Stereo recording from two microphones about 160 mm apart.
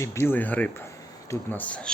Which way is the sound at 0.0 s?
15° left (ahead or behind).